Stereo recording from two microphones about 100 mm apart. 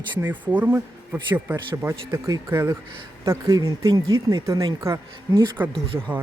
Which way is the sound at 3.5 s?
40° right (ahead or behind).